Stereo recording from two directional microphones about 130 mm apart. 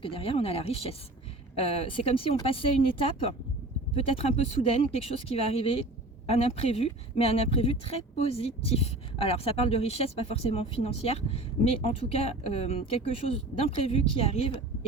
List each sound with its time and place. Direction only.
0.0 s speech: 45° left (ahead or behind)
14.2 s speech: 45° left (ahead or behind)